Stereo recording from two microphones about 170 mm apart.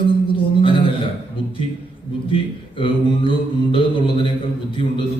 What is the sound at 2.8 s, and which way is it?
Mantra, 30° left (ahead or behind).